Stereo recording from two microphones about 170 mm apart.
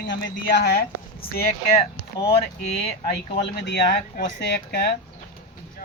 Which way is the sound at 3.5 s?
80° left.